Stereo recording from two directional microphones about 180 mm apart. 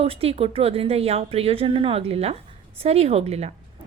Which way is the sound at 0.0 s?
35° right (ahead or behind).